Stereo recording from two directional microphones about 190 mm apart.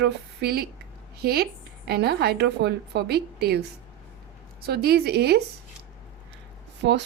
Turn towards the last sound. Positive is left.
turn(degrees=-70)  # may be behind; listen again after turning